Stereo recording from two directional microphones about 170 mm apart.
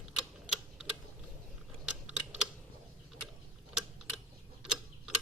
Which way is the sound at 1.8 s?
5° right (ahead or behind).